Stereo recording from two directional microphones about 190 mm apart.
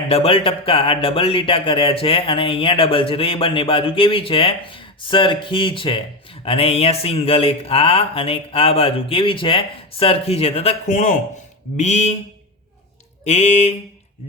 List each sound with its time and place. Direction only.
0.1 s speech: 30° left (ahead or behind)
13.2 s speech: 35° left (ahead or behind)